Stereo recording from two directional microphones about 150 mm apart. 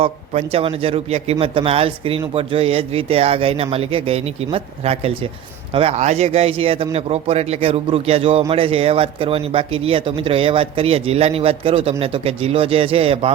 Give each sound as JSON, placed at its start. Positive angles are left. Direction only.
{"t": 0.0, "sound": "a man's voice", "side_deg": -40}